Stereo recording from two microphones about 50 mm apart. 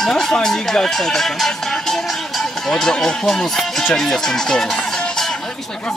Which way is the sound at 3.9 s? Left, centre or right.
Centre.